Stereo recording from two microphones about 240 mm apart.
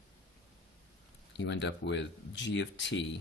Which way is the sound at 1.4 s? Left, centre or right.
Left.